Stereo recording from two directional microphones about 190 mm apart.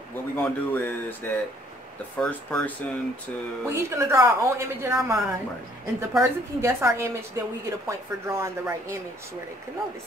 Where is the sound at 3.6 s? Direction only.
15° right (ahead or behind).